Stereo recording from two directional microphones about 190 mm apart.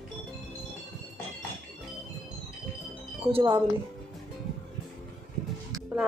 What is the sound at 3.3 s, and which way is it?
Speech, 25° right (ahead or behind).